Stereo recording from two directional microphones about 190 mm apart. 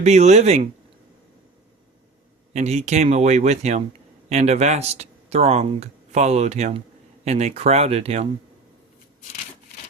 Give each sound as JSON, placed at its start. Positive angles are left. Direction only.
{"t": 0.0, "sound": "speech", "side_deg": -35}
{"t": 2.5, "sound": "speech", "side_deg": -35}